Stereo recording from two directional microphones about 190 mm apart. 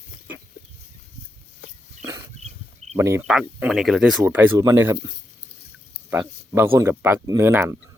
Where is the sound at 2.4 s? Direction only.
35° right (ahead or behind).